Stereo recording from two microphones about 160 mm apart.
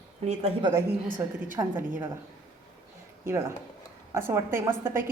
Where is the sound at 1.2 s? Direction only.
15° right (ahead or behind).